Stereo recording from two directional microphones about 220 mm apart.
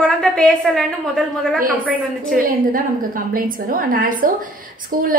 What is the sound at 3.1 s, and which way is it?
A woman's voice, 40° right (ahead or behind).